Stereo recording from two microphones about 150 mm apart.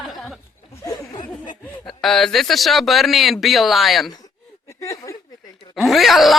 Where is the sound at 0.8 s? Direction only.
25° left (ahead or behind).